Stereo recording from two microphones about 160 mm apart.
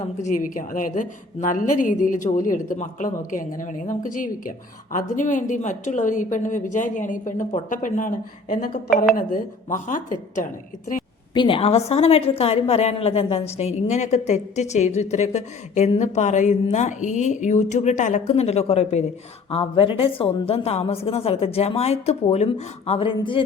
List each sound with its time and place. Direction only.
0.2 s a woman's voice: 50° left (ahead or behind)
11.3 s a woman's voice: 35° left (ahead or behind)